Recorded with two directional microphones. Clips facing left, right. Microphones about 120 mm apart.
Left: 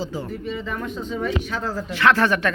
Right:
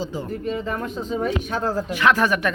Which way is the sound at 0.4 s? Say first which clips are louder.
Right 2 dB; 40° right (ahead or behind).